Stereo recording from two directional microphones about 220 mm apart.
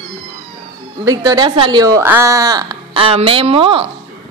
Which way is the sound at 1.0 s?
15° right (ahead or behind).